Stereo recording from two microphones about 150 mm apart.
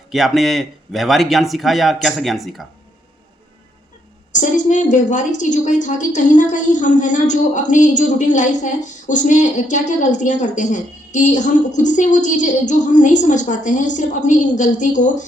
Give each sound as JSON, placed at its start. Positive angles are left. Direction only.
{"t": 0.1, "sound": "speech", "side_deg": 0}
{"t": 4.3, "sound": "a woman's voice", "side_deg": 55}